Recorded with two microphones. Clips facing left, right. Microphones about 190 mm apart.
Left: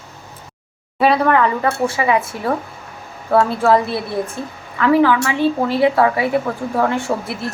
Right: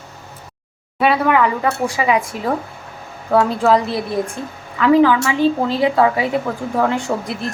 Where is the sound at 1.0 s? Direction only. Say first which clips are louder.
Left 1 dB; 5° right (ahead or behind).